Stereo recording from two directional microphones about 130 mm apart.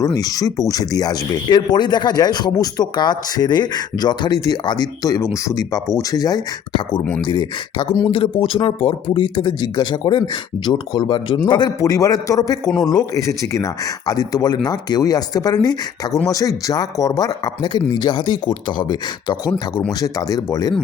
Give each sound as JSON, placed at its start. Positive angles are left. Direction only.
{"t": 0.0, "sound": "speech", "side_deg": 30}
{"t": 7.0, "sound": "speech", "side_deg": 10}
{"t": 7.3, "sound": "speech", "side_deg": 35}
{"t": 8.4, "sound": "speech", "side_deg": 45}